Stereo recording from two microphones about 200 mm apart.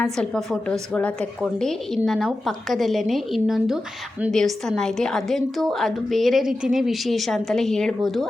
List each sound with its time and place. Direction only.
0.0 s a woman's voice: 5° left (ahead or behind)